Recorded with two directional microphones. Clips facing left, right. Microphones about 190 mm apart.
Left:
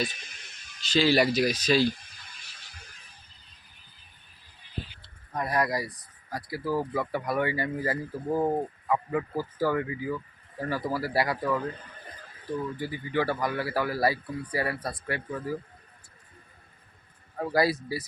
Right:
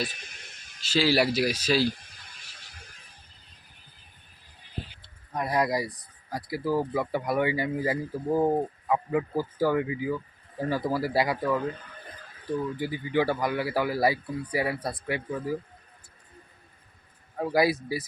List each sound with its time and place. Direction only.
0.8 s speech: 5° right (ahead or behind)
5.3 s speech: 15° right (ahead or behind)
12.8 s speech: 15° right (ahead or behind)
17.3 s speech: 10° right (ahead or behind)